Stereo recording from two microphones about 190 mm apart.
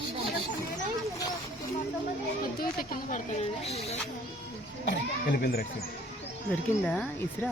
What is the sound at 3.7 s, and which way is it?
Music, 35° left (ahead or behind).